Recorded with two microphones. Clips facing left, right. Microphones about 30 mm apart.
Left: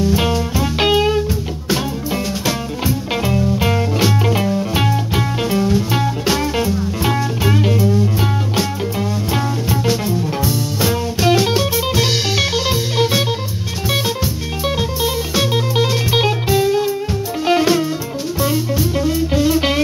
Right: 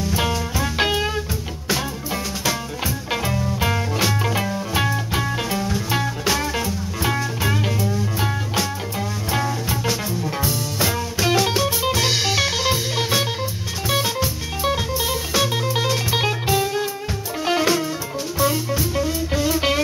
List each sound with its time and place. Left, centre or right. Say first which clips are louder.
0.0 s music: left 6 dB; centre
3.1 s music: left 5 dB; centre